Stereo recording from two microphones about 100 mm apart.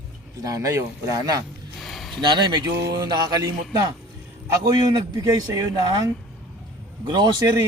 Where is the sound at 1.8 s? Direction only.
Centre (ahead or behind).